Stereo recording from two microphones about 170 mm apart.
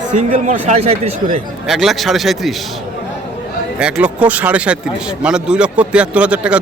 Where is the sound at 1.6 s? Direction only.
Centre (ahead or behind).